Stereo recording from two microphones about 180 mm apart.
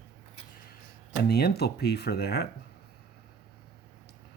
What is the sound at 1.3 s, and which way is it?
Speech, 60° left (ahead or behind).